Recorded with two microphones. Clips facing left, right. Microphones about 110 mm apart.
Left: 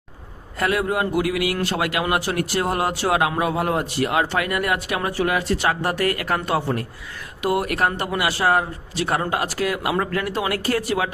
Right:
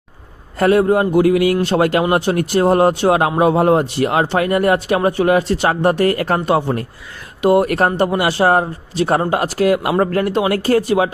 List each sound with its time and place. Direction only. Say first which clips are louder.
0.6 s speech: right 9 dB; 30° right (ahead or behind)
6.4 s speech: right 6 dB; 20° right (ahead or behind)
9.8 s speech: right 7 dB; 40° right (ahead or behind)
10.2 s speech: right 7 dB; 25° right (ahead or behind)